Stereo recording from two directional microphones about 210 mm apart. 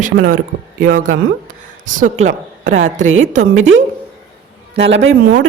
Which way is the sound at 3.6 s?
65° right (ahead or behind).